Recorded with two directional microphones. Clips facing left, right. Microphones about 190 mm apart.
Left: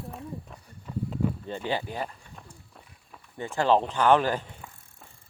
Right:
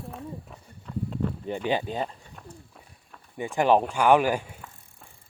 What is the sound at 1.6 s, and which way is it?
Speech, 20° right (ahead or behind).